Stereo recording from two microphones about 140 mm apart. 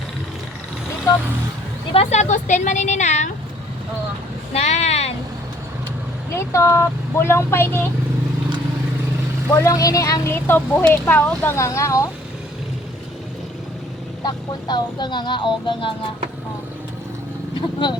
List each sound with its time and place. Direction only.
1.9 s speech: 50° left (ahead or behind)
4.5 s a sound: 50° left (ahead or behind)
6.3 s speech: 20° left (ahead or behind)
9.6 s speech: 25° left (ahead or behind)
14.3 s music: 30° left (ahead or behind)
17.8 s music: 35° left (ahead or behind)